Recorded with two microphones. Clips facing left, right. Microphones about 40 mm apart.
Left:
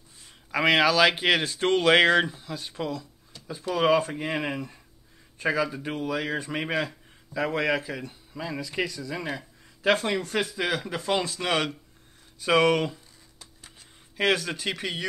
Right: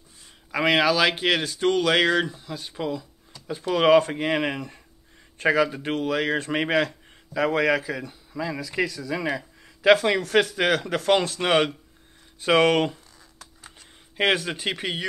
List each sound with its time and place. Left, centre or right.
0.5 s speech: centre
1.4 s speech: left
2.3 s speech: centre
3.4 s speech: right
5.9 s speech: right
7.8 s speech: centre
9.3 s speech: right
10.5 s speech: right
11.1 s speech: right
14.1 s speech: right